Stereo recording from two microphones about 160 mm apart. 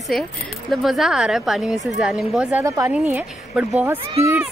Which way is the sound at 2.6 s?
20° right (ahead or behind).